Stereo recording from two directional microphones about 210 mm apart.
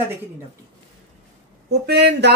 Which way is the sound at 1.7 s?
50° right (ahead or behind).